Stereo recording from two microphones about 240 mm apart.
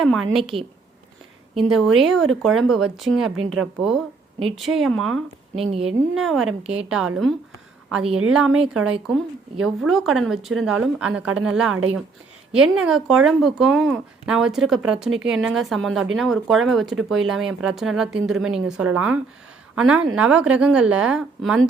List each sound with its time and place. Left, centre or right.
0.0 s speech: centre
0.5 s speech: right
1.5 s a woman's voice: centre